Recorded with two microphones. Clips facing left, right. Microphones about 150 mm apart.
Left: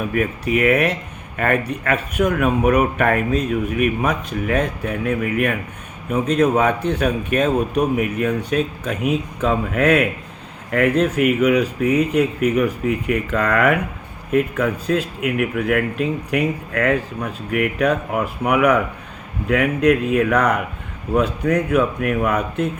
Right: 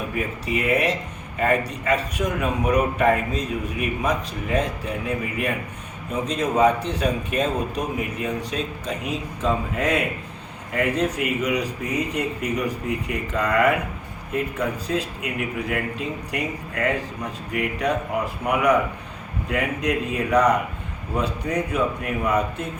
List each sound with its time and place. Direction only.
0.1 s a man's voice: 60° left (ahead or behind)